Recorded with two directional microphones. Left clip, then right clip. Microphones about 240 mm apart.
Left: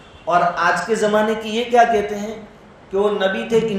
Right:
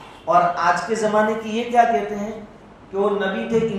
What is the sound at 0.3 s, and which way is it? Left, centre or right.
A man's voice, left.